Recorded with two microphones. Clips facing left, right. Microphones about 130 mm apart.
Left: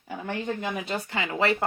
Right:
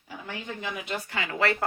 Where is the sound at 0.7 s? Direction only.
30° left (ahead or behind).